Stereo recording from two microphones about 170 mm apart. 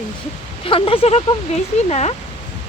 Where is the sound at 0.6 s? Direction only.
30° left (ahead or behind).